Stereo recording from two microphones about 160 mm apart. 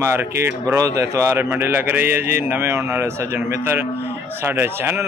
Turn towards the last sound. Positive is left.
turn(degrees=-15)  # may be behind; listen again after turning